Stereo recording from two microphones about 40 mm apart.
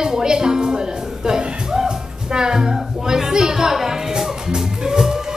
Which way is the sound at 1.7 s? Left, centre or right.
Centre.